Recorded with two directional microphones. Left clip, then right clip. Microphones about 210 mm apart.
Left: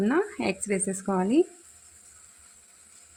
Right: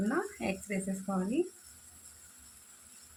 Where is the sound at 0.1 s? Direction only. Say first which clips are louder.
Left 8 dB; 45° left (ahead or behind).